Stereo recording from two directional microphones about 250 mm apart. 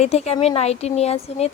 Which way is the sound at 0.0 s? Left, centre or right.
Left.